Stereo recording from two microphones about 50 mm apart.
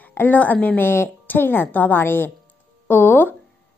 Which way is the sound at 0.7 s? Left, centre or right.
Left.